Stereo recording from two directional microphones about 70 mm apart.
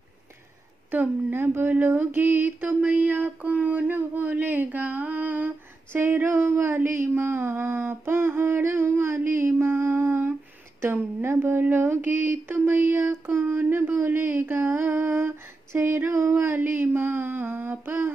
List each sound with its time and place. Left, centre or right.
0.9 s speech: right
5.9 s a sound: right
10.8 s mantra: right